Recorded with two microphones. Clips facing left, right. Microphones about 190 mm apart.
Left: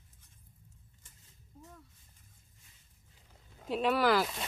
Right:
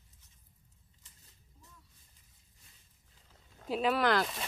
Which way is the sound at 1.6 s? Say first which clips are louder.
Left 10 dB; 55° left (ahead or behind).